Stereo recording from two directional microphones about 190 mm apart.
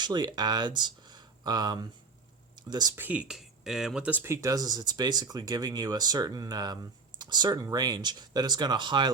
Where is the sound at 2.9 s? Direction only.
10° right (ahead or behind).